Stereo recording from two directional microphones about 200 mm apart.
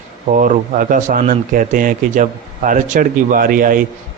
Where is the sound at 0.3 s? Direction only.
40° right (ahead or behind).